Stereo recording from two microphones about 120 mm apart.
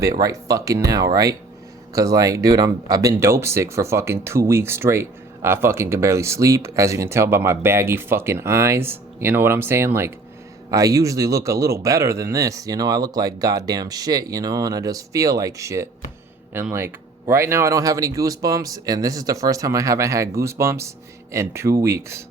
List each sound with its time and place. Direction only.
0.0 s speech: 30° right (ahead or behind)